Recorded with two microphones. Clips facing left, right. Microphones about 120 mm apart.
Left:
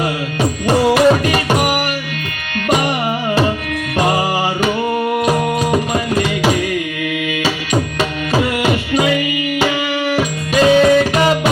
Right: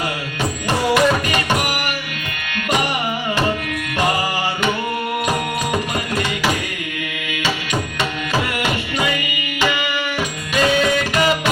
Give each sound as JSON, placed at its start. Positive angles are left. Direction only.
{"t": 0.7, "sound": "music", "side_deg": 40}
{"t": 7.4, "sound": "music", "side_deg": 35}
{"t": 10.2, "sound": "music", "side_deg": 35}